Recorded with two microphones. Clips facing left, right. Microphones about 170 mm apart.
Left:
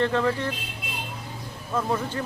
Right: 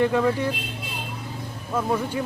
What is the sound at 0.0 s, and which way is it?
Speech, 10° right (ahead or behind).